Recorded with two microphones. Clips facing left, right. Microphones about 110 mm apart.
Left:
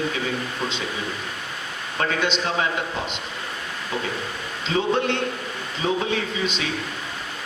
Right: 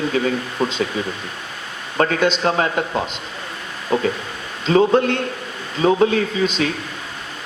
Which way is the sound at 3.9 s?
45° right (ahead or behind).